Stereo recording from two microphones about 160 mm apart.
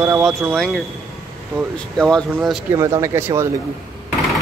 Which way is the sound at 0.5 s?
5° left (ahead or behind).